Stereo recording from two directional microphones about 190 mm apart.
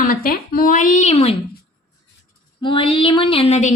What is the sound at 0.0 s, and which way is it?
A woman's voice, 50° left (ahead or behind).